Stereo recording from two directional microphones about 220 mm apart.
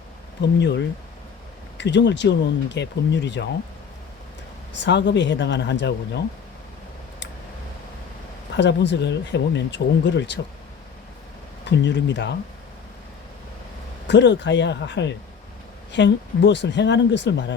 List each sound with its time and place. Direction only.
0.6 s speech: 55° left (ahead or behind)
4.7 s speech: 50° left (ahead or behind)
8.5 s speech: 50° left (ahead or behind)
11.6 s speech: 50° left (ahead or behind)
14.1 s speech: 55° left (ahead or behind)